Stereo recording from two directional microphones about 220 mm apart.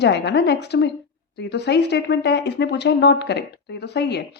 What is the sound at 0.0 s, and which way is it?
A woman's voice, 50° left (ahead or behind).